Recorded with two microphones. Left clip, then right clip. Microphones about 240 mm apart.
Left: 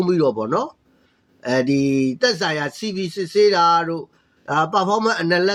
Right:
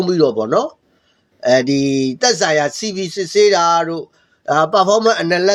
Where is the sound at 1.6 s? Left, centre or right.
Right.